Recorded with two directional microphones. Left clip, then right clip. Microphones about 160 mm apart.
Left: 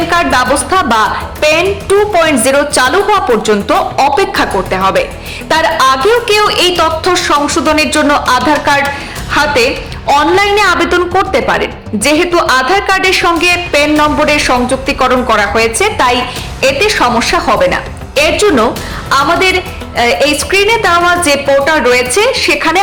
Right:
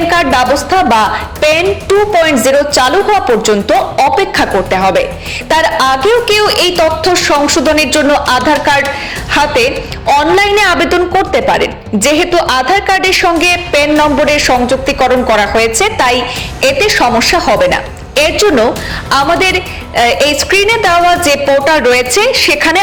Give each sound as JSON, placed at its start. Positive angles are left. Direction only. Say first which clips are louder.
{"t": 0.1, "sound": "a woman's voice", "louder": "even", "side_deg": -10}